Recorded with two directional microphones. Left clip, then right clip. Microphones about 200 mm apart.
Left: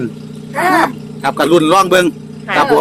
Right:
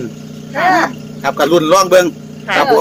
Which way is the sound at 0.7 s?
40° left (ahead or behind).